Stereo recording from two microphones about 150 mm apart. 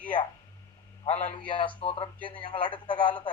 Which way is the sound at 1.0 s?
50° left (ahead or behind).